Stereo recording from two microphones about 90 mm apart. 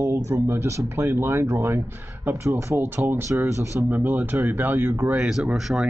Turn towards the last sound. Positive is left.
turn(degrees=-10)  # may be behind; listen again after turning